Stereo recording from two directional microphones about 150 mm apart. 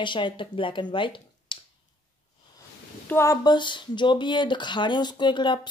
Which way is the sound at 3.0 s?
20° left (ahead or behind).